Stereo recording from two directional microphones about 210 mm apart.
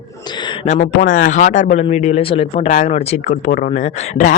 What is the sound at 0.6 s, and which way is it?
Speech, 35° left (ahead or behind).